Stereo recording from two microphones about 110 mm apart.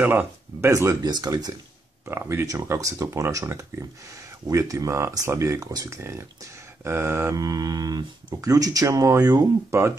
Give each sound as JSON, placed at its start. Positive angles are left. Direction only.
{"t": 0.0, "sound": "speech", "side_deg": -15}
{"t": 2.0, "sound": "speech", "side_deg": -25}
{"t": 7.3, "sound": "speech", "side_deg": -35}